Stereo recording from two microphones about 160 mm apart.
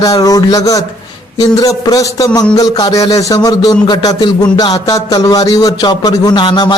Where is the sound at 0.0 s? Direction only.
20° left (ahead or behind).